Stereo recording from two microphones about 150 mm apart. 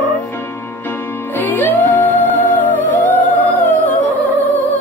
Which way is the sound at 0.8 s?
10° left (ahead or behind).